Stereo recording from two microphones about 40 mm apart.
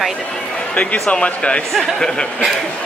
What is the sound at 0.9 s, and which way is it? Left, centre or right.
A man's voice, centre.